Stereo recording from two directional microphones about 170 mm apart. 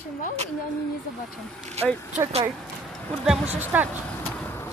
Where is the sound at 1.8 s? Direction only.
40° right (ahead or behind).